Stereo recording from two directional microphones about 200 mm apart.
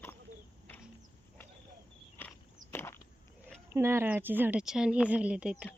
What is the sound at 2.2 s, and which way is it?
Walk, 10° left (ahead or behind).